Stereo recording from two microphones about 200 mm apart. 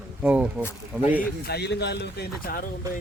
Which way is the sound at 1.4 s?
55° left (ahead or behind).